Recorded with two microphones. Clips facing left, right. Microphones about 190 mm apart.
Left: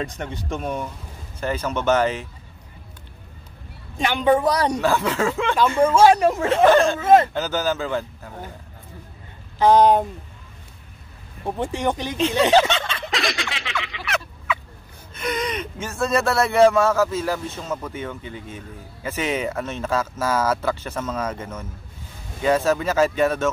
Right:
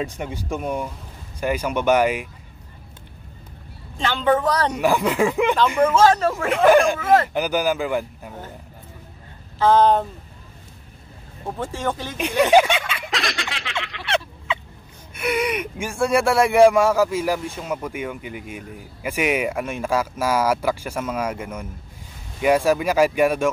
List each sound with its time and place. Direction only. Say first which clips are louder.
0.0 s speech: right 1 dB; 10° right (ahead or behind)
4.0 s speech: left 1 dB; 15° left (ahead or behind)
4.7 s speech: right 2 dB; 15° right (ahead or behind)
5.9 s speech: left 4 dB; 15° left (ahead or behind)
6.5 s speech: right 2 dB; 10° right (ahead or behind)
7.0 s speech: left 3 dB; 20° left (ahead or behind)
7.3 s speech: right 2 dB; 15° right (ahead or behind)
9.6 s speech: left 1 dB; 15° left (ahead or behind)
11.4 s speech: left 2 dB; 20° left (ahead or behind)
12.2 s snicker: right 1 dB; 15° right (ahead or behind)
14.0 s fowl: right 4 dB; 30° right (ahead or behind)
15.1 s speech: right 3 dB; 10° right (ahead or behind)